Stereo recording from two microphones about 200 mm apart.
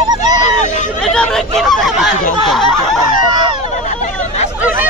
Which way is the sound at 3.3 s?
25° right (ahead or behind).